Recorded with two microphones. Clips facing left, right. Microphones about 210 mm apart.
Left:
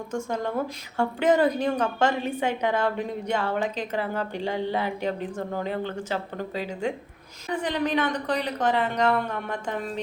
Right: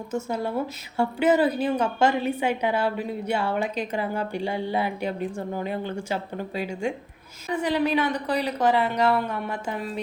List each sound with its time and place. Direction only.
0.1 s a woman's voice: 10° right (ahead or behind)